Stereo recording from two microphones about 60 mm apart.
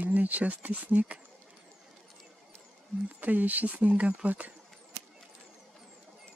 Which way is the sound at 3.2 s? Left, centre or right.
Right.